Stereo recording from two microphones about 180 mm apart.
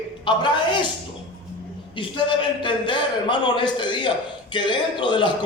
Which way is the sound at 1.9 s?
30° left (ahead or behind).